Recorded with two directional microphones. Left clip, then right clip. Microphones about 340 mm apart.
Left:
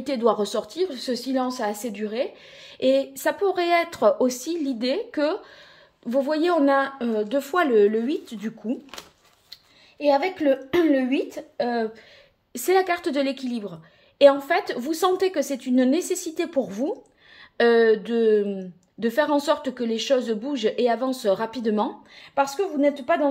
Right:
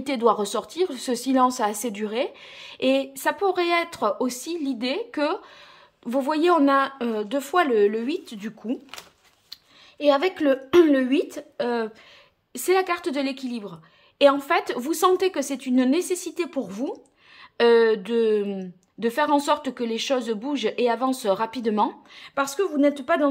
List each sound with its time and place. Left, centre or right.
0.0 s a woman's voice: centre